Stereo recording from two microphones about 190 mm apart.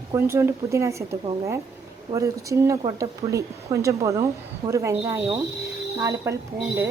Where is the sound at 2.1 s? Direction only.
15° right (ahead or behind).